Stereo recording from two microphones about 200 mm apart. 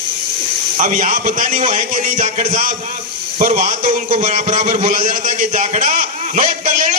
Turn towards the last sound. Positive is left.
turn(degrees=-40)  # may be behind; listen again after turning